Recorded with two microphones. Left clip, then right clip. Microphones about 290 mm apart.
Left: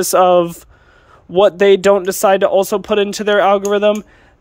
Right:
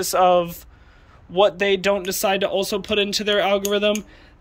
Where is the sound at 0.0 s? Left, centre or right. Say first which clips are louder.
Left 6 dB; left.